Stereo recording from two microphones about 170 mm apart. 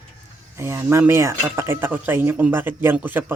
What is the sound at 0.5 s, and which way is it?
Speech, 15° right (ahead or behind).